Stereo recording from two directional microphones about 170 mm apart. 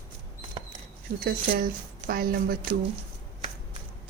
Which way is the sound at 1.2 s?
60° right (ahead or behind).